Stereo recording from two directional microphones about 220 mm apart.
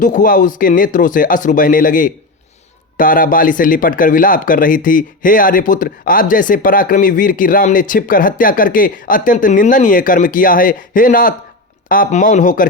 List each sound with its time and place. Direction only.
0.0 s speech: 35° left (ahead or behind)